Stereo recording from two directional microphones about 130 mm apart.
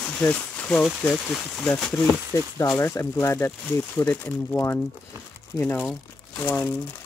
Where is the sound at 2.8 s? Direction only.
20° left (ahead or behind).